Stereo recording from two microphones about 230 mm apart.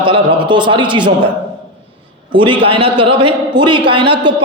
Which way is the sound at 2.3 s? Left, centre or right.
Right.